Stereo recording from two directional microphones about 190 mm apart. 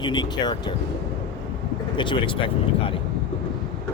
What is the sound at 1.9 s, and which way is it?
Speech, 25° left (ahead or behind).